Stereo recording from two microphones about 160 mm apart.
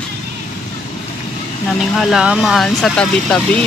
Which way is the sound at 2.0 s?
Centre (ahead or behind).